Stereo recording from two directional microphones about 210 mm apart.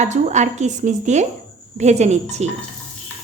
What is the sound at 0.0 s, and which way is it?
Speech, 35° right (ahead or behind).